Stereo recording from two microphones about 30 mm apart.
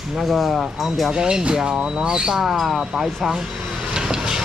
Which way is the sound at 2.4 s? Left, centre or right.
Centre.